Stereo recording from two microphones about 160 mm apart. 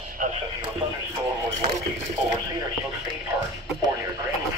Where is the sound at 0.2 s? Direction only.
55° right (ahead or behind).